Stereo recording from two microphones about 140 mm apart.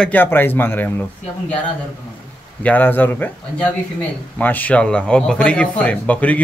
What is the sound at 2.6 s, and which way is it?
Speech, 10° left (ahead or behind).